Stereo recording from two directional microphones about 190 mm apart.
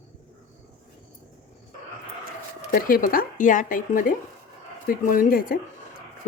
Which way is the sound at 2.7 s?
50° left (ahead or behind).